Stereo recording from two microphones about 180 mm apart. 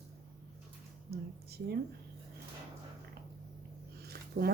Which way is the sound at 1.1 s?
60° right (ahead or behind).